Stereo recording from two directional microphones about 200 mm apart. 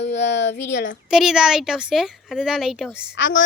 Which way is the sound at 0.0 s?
60° left (ahead or behind).